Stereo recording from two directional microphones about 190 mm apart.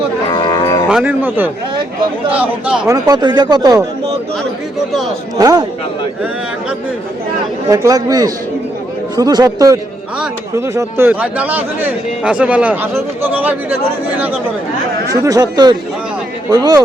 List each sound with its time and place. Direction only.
0.3 s livestock: 25° left (ahead or behind)
0.9 s speech: 5° right (ahead or behind)
2.9 s speech: 20° right (ahead or behind)
5.4 s speech: 20° right (ahead or behind)
7.7 s speech: 20° right (ahead or behind)
15.1 s speech: 20° right (ahead or behind)